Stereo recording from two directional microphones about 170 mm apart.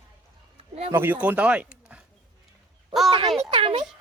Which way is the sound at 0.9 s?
10° right (ahead or behind).